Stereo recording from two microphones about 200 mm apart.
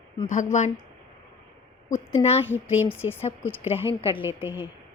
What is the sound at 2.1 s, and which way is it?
Speech, 30° left (ahead or behind).